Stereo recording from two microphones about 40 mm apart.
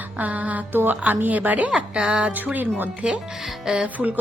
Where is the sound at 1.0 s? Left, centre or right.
Right.